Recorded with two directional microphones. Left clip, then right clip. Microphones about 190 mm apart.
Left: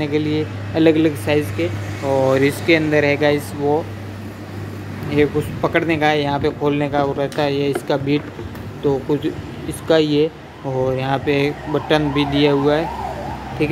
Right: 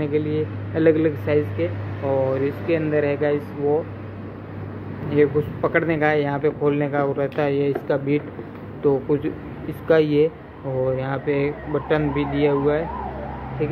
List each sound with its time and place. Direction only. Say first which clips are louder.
0.0 s speech: left 3 dB; 10° left (ahead or behind)
2.2 s speech: left 7 dB; 25° left (ahead or behind)
5.1 s speech: left 1 dB; 10° left (ahead or behind)